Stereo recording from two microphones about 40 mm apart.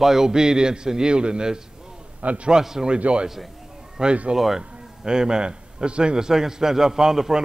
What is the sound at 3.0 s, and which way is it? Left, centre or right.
A man's voice, right.